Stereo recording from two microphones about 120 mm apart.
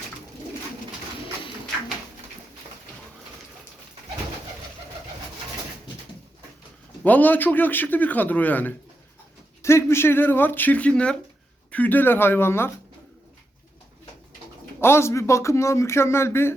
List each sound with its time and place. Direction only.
7.0 s speech: 15° left (ahead or behind)
14.8 s speech: 20° left (ahead or behind)